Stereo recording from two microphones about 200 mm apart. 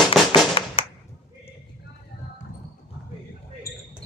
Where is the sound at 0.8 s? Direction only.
25° left (ahead or behind).